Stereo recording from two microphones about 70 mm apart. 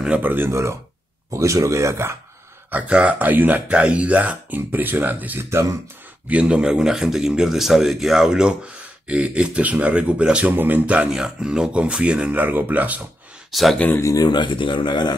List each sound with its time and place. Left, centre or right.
0.0 s speech: centre
0.3 s speech: right
2.7 s speech: centre
5.5 s speech: right
6.2 s speech: centre
10.5 s speech: right
11.1 s speech: centre
13.5 s speech: centre
14.0 s speech: left